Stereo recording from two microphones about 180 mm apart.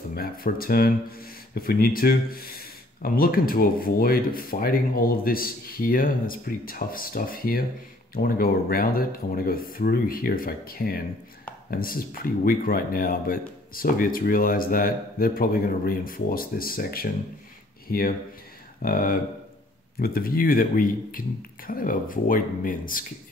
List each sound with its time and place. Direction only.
0.1 s speech: 55° left (ahead or behind)